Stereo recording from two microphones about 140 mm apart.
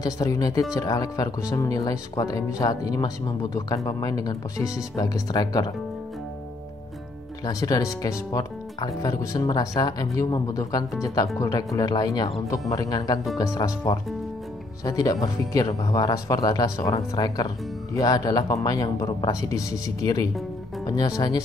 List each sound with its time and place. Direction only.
0.0 s speech: 25° left (ahead or behind)
7.4 s speech: 25° left (ahead or behind)